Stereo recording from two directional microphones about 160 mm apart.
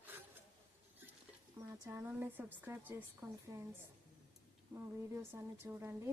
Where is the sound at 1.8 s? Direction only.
15° right (ahead or behind).